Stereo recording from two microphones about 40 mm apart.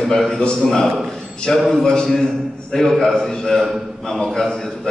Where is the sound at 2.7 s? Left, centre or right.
Centre.